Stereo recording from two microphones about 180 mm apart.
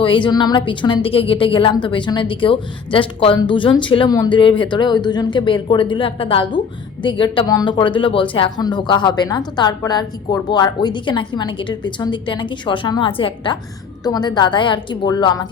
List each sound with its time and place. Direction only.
0.0 s a woman's voice: 30° left (ahead or behind)